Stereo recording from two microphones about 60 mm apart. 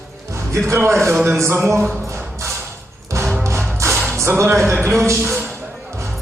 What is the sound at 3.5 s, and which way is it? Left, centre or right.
Music, right.